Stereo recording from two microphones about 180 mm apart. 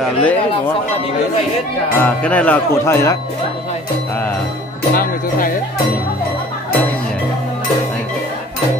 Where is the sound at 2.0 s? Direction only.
5° left (ahead or behind).